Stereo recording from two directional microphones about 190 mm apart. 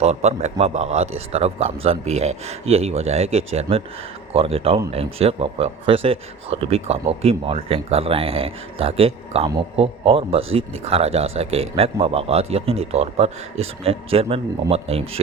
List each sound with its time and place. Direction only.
0.0 s a man's voice: 35° right (ahead or behind)